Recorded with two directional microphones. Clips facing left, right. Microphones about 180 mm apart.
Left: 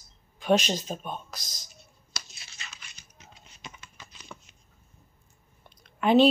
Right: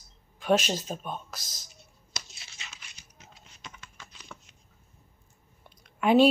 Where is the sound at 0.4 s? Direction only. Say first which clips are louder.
Left 1 dB; 5° right (ahead or behind).